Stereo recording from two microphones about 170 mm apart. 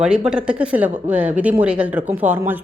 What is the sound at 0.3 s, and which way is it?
Speech, 5° right (ahead or behind).